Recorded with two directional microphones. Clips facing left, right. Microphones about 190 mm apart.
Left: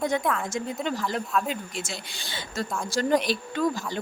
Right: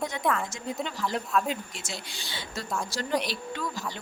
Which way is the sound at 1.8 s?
55° left (ahead or behind).